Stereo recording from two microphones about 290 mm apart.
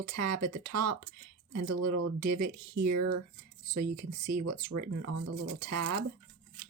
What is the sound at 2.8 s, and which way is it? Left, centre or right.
Speech, right.